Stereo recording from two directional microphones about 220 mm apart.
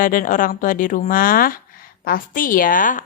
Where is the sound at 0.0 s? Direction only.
40° left (ahead or behind).